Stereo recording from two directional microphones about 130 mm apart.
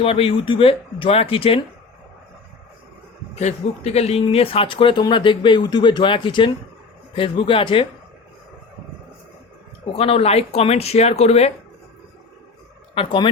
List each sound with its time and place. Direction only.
0.0 s speech: 45° left (ahead or behind)
3.3 s speech: 55° left (ahead or behind)
9.9 s speech: 50° left (ahead or behind)
12.9 s speech: 40° left (ahead or behind)